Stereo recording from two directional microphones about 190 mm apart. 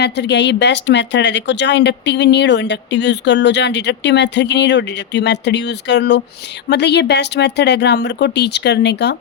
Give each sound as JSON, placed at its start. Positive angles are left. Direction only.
{"t": 0.0, "sound": "speech", "side_deg": 65}